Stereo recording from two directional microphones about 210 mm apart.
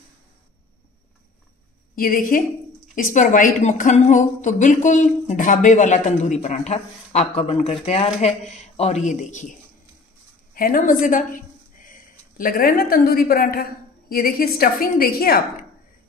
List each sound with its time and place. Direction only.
2.0 s speech: 40° left (ahead or behind)
10.5 s speech: 40° left (ahead or behind)